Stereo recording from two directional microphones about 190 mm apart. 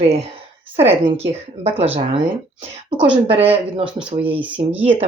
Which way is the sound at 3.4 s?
30° right (ahead or behind).